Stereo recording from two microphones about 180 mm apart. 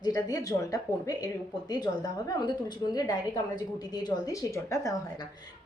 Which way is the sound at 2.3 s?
25° left (ahead or behind).